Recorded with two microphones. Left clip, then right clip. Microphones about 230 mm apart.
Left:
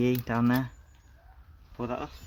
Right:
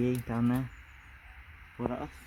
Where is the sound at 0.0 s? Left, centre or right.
Centre.